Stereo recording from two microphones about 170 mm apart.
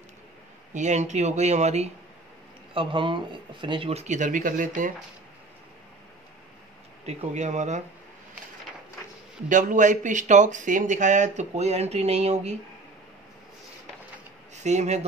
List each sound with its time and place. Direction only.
0.7 s speech: 45° right (ahead or behind)
2.7 s speech: 30° right (ahead or behind); by 4.9 s 50° right (ahead or behind)
7.1 s speech: 40° right (ahead or behind)
9.5 s speech: 50° right (ahead or behind)
14.5 s speech: 40° right (ahead or behind)